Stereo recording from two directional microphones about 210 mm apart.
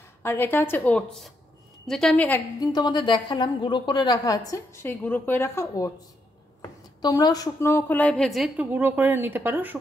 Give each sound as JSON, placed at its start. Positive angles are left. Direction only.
{"t": 0.2, "sound": "a woman's voice", "side_deg": 10}
{"t": 7.0, "sound": "a woman's voice", "side_deg": 20}